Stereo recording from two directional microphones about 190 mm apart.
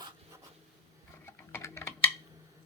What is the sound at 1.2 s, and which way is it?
Clock, 15° left (ahead or behind).